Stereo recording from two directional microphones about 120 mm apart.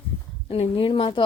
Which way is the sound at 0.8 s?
45° left (ahead or behind).